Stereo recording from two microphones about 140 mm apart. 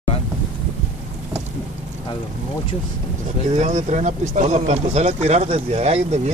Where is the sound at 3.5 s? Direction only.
60° right (ahead or behind).